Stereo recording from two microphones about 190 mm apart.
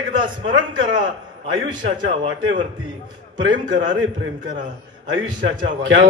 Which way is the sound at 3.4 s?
70° right (ahead or behind).